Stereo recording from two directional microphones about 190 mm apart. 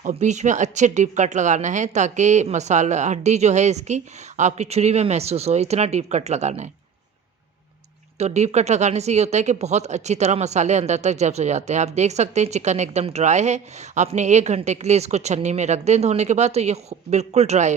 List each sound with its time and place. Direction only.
0.0 s speech: 40° right (ahead or behind)
8.2 s speech: 35° right (ahead or behind)